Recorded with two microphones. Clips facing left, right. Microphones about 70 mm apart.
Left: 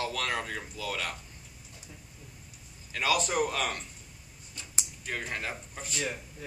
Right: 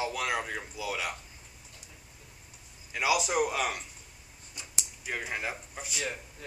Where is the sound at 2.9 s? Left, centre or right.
Centre.